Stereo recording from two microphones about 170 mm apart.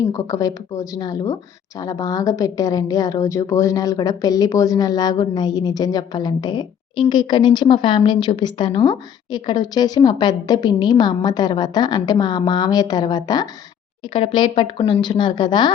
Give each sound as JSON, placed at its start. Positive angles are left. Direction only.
{"t": 0.1, "sound": "speech", "side_deg": 20}